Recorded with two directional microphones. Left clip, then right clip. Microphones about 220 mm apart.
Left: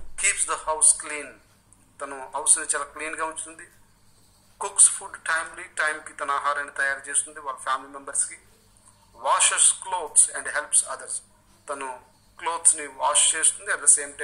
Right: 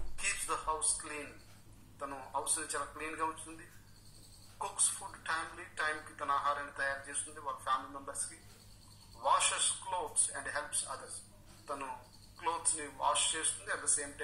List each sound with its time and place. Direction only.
0.1 s a man's voice: 25° left (ahead or behind)
4.6 s a woman's voice: 25° left (ahead or behind)
9.2 s a woman's voice: 25° left (ahead or behind)